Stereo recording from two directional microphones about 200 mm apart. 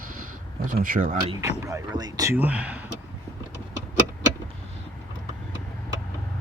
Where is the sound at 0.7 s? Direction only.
45° right (ahead or behind).